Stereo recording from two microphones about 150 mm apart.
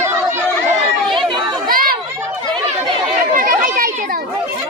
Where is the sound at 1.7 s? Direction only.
75° right (ahead or behind).